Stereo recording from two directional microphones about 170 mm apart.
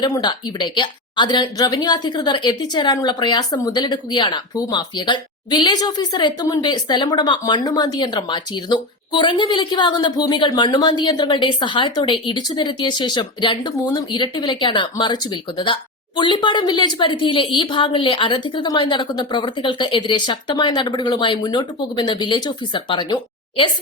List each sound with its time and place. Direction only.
0.0 s a woman's voice: 25° left (ahead or behind)